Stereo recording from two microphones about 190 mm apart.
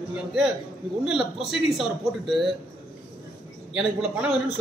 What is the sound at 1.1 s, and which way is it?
A woman's voice, centre (ahead or behind).